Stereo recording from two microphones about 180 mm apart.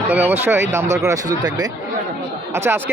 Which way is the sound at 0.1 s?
10° right (ahead or behind).